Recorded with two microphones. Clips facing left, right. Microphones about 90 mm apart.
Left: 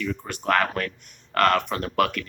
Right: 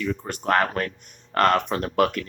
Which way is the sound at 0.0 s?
35° right (ahead or behind).